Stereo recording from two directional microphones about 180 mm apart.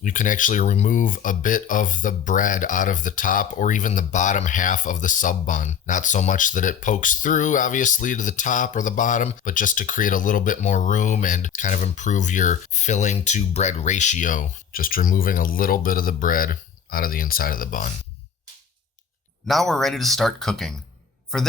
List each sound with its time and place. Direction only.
0.0 s speech: 45° left (ahead or behind)
19.5 s speech: centre (ahead or behind)